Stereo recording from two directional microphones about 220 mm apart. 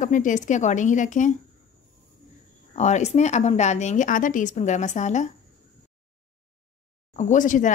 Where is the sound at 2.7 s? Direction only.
30° left (ahead or behind).